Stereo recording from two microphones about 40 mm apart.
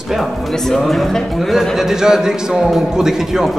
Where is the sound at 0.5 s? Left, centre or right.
Centre.